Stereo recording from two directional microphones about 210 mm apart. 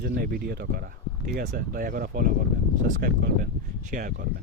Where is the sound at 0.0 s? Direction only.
45° right (ahead or behind).